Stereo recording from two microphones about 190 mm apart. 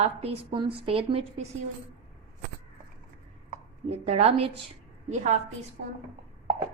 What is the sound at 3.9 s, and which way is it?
Speech, 35° right (ahead or behind).